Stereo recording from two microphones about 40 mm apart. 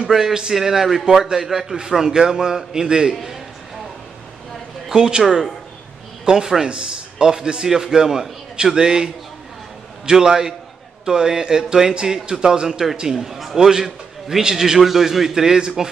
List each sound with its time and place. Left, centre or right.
0.0 s a man's voice: centre
4.9 s a man's voice: centre
5.2 s a man's voice: centre